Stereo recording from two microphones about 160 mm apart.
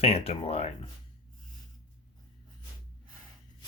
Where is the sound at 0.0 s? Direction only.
40° left (ahead or behind).